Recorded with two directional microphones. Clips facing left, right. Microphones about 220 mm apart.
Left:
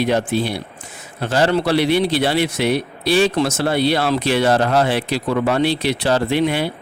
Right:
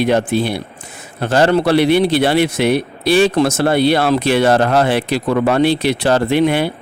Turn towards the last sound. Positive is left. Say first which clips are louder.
# right 4 dB
turn(degrees=-55)  # may be behind; listen again after turning